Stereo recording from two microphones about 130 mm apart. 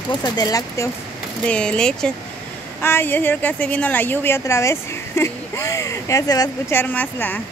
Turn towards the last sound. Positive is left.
turn(degrees=15)  # may be behind; listen again after turning